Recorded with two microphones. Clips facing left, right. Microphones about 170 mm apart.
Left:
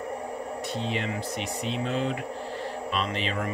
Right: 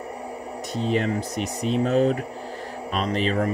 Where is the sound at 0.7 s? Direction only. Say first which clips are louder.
Right 9 dB; 45° right (ahead or behind).